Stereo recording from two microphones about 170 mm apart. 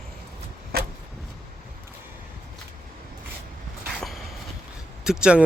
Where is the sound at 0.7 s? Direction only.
65° right (ahead or behind).